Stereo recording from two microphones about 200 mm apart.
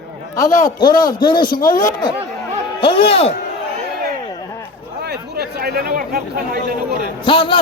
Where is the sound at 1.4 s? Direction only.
45° left (ahead or behind).